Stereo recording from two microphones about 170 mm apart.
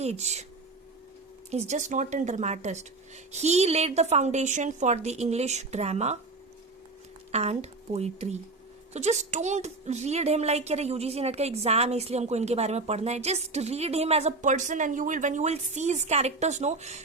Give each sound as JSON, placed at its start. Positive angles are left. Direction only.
{"t": 0.0, "sound": "a woman's voice", "side_deg": -40}
{"t": 1.5, "sound": "a woman's voice", "side_deg": -40}
{"t": 7.3, "sound": "a woman's voice", "side_deg": -40}